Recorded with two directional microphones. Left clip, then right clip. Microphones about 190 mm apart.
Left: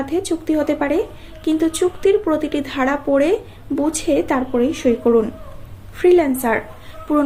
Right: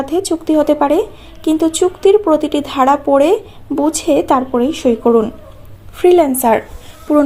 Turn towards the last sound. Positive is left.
turn(degrees=-25)  # may be behind; listen again after turning